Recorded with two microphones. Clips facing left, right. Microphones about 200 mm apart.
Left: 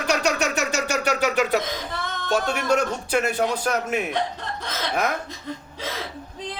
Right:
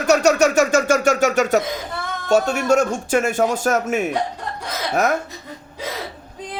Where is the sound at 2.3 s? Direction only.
45° right (ahead or behind).